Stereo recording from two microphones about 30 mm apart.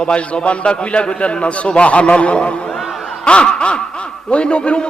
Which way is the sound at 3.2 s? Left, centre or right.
Left.